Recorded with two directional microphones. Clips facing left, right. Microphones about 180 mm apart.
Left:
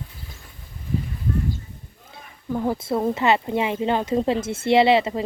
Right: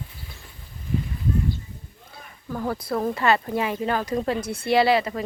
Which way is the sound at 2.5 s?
20° left (ahead or behind).